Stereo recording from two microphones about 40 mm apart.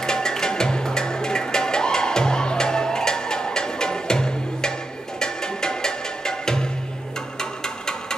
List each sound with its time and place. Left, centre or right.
0.0 s music: centre